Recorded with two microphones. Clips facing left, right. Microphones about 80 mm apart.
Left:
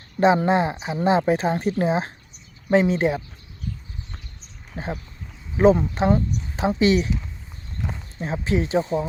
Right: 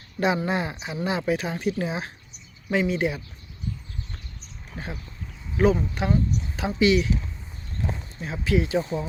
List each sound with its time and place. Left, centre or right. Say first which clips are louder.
0.4 s speech: left 7 dB; left
4.7 s speech: left 6 dB; left
8.2 s speech: left 1 dB; left